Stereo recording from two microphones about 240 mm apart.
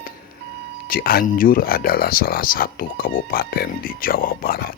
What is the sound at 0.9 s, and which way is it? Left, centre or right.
Speech, left.